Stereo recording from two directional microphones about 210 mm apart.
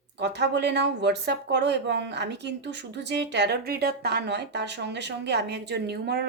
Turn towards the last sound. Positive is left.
turn(degrees=-50)  # may be behind; listen again after turning